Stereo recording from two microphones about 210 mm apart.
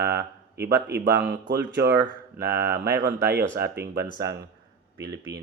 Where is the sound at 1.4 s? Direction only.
45° right (ahead or behind).